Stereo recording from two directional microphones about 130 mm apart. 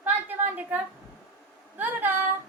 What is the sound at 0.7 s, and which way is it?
Speech, 15° right (ahead or behind).